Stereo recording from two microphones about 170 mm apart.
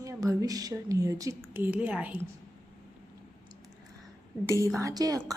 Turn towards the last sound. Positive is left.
turn(degrees=-20)  # may be behind; listen again after turning